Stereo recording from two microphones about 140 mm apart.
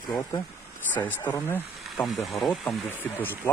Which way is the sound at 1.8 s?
Centre (ahead or behind).